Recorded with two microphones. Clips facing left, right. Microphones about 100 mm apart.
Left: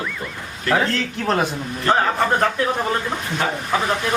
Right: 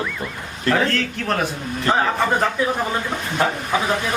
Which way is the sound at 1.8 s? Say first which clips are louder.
Left 1 dB; centre (ahead or behind).